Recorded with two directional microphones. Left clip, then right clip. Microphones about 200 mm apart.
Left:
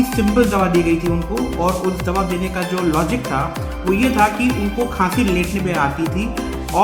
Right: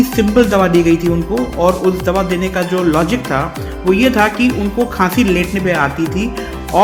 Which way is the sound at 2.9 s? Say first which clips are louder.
Right 4 dB; 20° right (ahead or behind).